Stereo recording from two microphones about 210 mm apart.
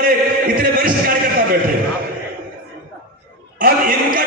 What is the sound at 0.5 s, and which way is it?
Music, 45° right (ahead or behind).